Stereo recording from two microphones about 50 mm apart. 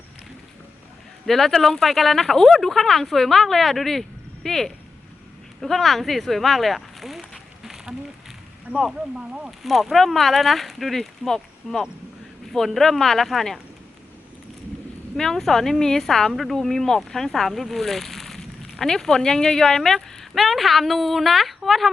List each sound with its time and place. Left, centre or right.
1.3 s a woman's voice: centre
9.1 s speech: centre
9.5 s speech: centre
15.1 s a woman's voice: centre